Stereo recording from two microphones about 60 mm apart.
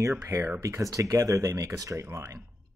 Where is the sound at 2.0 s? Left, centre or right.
Right.